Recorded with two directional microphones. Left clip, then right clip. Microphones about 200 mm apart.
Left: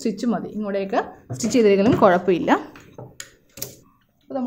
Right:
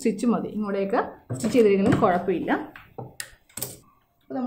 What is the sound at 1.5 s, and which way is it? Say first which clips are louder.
Speech: left 3 dB; 35° left (ahead or behind).